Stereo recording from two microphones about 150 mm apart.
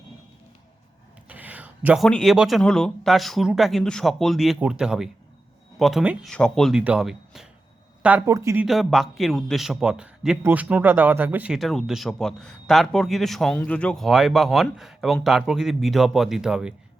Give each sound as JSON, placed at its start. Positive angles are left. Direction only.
{"t": 1.3, "sound": "a sound", "side_deg": -10}
{"t": 2.0, "sound": "speech", "side_deg": 0}
{"t": 8.6, "sound": "speech", "side_deg": 0}